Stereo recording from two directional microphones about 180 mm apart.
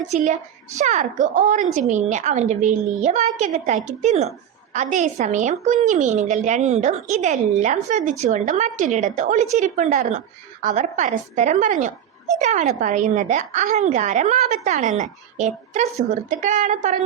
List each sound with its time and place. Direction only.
0.0 s a woman's voice: 40° right (ahead or behind)